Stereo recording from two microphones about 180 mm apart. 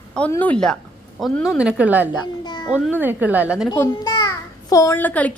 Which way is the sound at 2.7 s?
5° right (ahead or behind).